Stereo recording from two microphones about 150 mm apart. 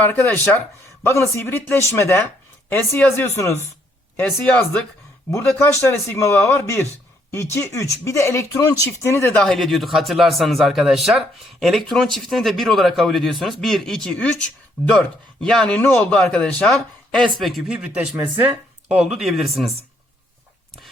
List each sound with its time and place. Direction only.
0.0 s speech: 10° left (ahead or behind)
9.4 s speech: 5° left (ahead or behind)